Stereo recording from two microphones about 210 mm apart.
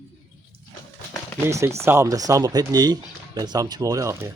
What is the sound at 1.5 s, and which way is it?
Speech, 15° right (ahead or behind).